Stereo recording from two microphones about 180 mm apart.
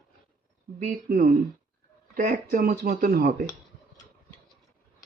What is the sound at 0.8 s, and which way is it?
Speech, 50° right (ahead or behind).